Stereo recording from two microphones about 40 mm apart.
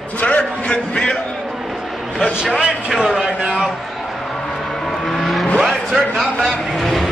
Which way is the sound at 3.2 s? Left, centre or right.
Centre.